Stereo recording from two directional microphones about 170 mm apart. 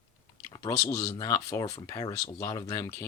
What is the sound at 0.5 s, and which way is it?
Speech, 20° left (ahead or behind).